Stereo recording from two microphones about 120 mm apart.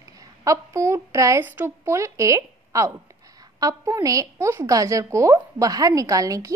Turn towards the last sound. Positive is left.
turn(degrees=-30)  # may be behind; listen again after turning